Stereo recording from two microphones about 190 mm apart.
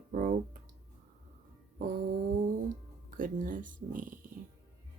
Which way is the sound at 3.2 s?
45° right (ahead or behind).